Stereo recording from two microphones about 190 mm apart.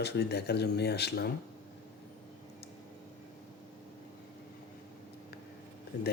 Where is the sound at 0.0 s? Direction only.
60° left (ahead or behind).